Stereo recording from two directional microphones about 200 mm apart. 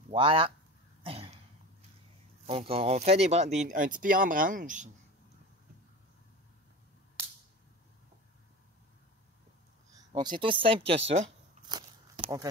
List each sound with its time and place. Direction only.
0.1 s speech: 25° right (ahead or behind)
1.0 s cough: 25° right (ahead or behind)
2.4 s speech: 30° right (ahead or behind)
9.9 s speech: 20° right (ahead or behind)
11.6 s a sound: 20° right (ahead or behind)